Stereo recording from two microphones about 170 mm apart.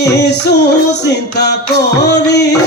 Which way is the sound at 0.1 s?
80° left.